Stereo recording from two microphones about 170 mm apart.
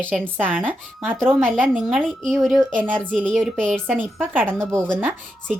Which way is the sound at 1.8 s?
Centre (ahead or behind).